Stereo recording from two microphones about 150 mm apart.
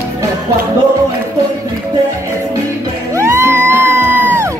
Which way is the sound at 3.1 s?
20° right (ahead or behind).